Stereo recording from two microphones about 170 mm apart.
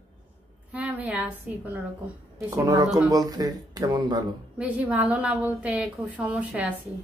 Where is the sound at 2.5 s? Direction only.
20° right (ahead or behind).